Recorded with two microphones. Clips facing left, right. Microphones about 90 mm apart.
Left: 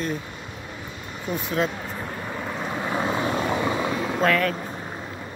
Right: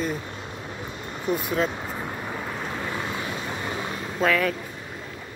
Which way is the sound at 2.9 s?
35° left (ahead or behind).